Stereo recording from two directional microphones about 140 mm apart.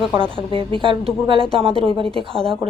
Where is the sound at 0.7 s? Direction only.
40° right (ahead or behind).